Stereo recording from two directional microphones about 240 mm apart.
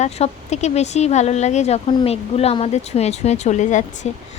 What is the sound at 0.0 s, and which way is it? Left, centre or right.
Speech, left.